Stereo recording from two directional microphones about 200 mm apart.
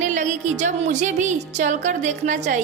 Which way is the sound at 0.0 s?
35° right (ahead or behind).